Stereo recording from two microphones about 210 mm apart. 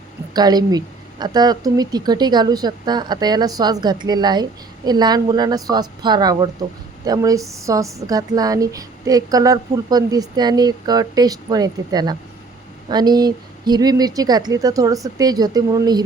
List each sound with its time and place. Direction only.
0.3 s a woman's voice: 20° right (ahead or behind)